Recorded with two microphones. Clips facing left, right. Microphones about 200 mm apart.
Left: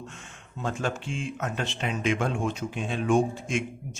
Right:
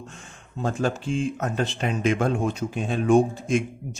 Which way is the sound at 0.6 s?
35° right (ahead or behind).